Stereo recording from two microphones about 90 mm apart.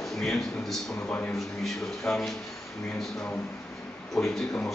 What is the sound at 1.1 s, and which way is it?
Speech, 20° left (ahead or behind).